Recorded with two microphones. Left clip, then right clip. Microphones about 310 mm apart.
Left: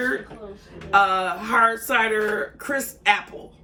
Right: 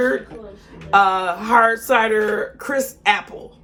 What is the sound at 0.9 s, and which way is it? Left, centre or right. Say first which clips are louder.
Speech: right 3 dB; centre.